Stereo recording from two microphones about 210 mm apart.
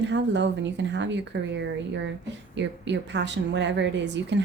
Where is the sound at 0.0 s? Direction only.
55° right (ahead or behind).